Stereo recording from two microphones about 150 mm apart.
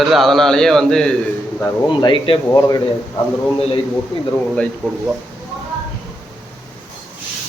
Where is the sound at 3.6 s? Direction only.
35° left (ahead or behind).